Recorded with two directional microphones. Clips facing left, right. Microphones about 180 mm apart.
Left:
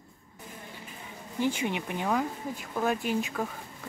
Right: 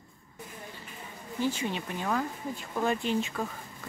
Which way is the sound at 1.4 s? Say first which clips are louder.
Left 2 dB; 15° left (ahead or behind).